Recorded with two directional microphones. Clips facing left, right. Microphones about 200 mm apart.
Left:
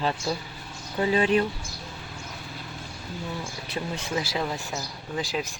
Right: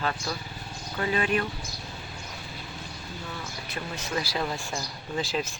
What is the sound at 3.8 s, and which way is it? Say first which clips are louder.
Speech: left 5 dB; 20° left (ahead or behind).